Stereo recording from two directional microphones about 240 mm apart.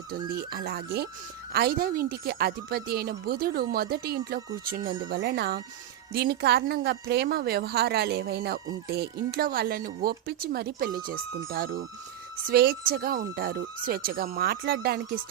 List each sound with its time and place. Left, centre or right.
0.3 s speech: right
4.8 s speech: centre
5.0 s speech: right